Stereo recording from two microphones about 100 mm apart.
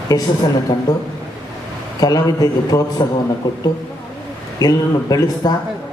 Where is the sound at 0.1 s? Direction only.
35° left (ahead or behind).